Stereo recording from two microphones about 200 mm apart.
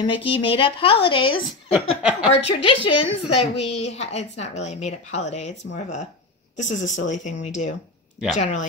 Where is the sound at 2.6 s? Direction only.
25° left (ahead or behind).